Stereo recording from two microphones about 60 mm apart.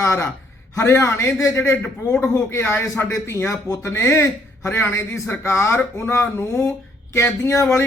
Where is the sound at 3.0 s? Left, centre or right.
Left.